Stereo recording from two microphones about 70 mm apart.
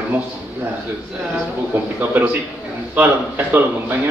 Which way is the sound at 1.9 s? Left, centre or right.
Right.